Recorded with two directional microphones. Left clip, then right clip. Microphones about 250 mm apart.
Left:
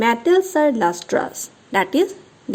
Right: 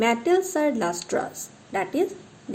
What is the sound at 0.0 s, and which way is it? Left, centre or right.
A woman's voice, left.